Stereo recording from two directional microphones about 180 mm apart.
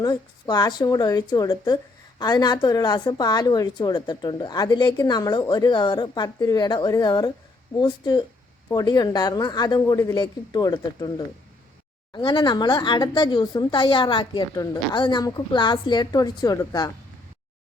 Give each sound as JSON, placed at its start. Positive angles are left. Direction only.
{"t": 0.0, "sound": "a woman's voice", "side_deg": 25}
{"t": 12.1, "sound": "a woman's voice", "side_deg": 25}